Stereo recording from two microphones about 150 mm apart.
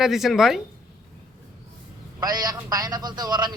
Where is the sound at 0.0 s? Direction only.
Centre (ahead or behind).